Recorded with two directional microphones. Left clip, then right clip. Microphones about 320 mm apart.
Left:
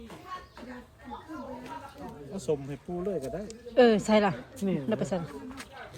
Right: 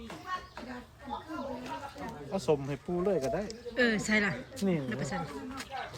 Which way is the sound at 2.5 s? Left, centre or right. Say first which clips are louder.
Right 1 dB; right.